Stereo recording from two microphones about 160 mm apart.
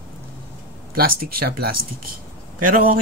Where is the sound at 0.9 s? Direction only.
70° right (ahead or behind).